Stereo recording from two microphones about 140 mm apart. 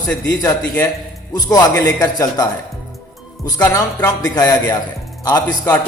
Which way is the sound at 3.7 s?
25° left (ahead or behind).